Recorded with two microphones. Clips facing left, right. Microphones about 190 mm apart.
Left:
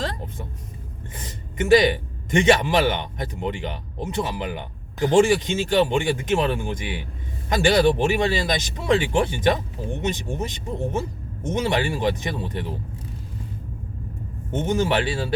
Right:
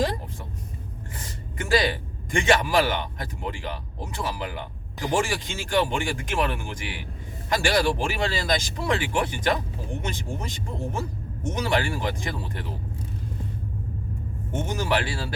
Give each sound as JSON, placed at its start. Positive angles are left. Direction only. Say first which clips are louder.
{"t": 1.1, "sound": "speech", "louder": "left 4 dB", "side_deg": 20}
{"t": 14.5, "sound": "speech", "louder": "left 4 dB", "side_deg": 25}